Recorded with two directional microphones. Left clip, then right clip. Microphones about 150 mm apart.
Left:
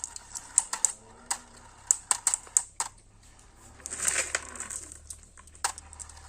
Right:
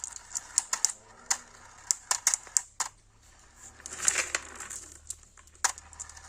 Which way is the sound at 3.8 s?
90° right.